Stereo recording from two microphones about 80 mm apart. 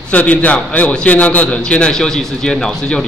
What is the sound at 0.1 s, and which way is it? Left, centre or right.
A man's voice, centre.